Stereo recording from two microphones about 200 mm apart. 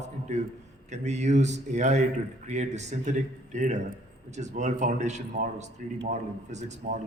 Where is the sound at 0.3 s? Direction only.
35° right (ahead or behind).